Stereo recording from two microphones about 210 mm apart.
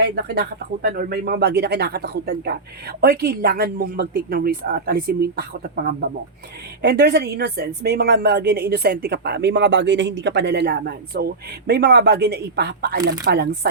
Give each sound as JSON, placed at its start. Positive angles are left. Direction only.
{"t": 0.3, "sound": "speech", "side_deg": -45}